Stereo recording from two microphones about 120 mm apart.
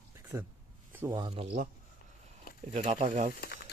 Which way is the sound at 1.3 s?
60° right (ahead or behind).